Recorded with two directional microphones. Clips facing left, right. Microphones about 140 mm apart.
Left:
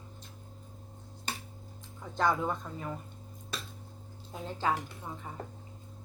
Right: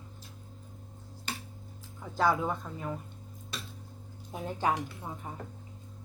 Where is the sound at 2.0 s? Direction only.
5° right (ahead or behind).